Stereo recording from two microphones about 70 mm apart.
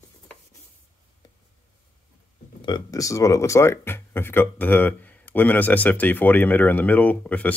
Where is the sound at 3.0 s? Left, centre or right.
Left.